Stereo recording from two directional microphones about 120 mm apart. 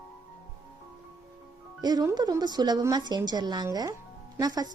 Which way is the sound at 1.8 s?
35° right (ahead or behind).